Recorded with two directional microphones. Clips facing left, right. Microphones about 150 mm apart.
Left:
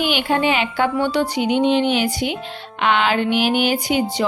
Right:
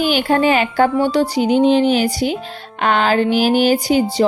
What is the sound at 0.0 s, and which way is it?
A woman's voice, 40° right (ahead or behind).